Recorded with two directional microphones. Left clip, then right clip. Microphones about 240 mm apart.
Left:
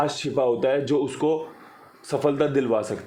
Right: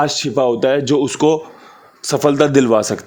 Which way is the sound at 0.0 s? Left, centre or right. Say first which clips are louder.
Right 7 dB; right.